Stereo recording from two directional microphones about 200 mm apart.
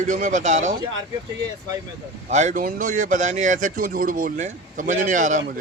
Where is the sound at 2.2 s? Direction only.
35° right (ahead or behind).